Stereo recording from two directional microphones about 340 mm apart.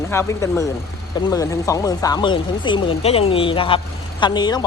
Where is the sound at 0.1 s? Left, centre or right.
Centre.